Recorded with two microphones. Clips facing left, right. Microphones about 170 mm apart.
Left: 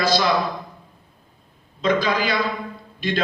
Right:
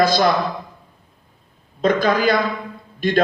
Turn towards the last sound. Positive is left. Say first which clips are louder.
# right 6 dB
turn(degrees=-50)  # may be behind; listen again after turning